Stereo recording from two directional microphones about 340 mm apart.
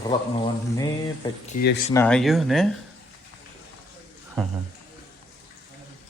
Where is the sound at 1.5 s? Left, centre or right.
Left.